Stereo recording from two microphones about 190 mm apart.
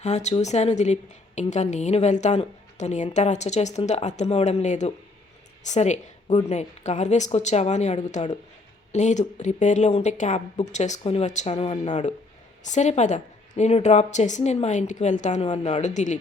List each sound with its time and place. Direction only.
0.0 s a woman's voice: 35° left (ahead or behind)